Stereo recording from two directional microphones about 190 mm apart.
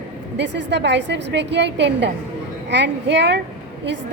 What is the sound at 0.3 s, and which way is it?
A woman's voice, 65° right (ahead or behind).